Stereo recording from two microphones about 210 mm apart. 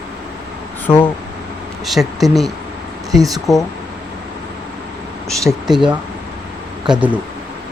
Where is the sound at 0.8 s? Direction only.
10° left (ahead or behind).